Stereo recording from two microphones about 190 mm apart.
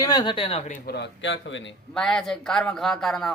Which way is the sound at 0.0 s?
20° left (ahead or behind).